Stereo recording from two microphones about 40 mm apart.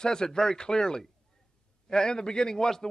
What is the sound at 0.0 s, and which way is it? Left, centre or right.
A man's voice, centre.